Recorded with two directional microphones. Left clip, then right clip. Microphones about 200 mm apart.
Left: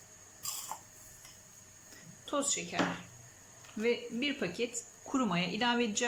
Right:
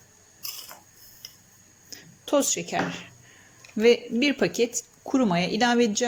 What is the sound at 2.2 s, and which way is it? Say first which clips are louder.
Speech: right 11 dB; 30° right (ahead or behind).